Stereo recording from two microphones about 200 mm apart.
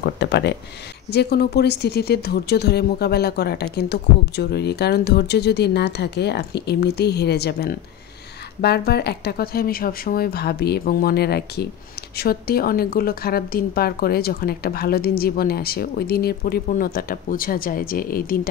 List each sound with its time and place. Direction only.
0.0 s speech: 60° left (ahead or behind)